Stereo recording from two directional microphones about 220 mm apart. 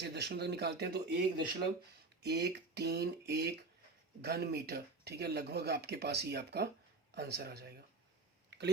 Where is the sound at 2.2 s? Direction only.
50° right (ahead or behind).